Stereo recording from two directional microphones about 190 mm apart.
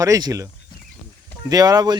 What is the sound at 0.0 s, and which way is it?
Speech, 20° right (ahead or behind).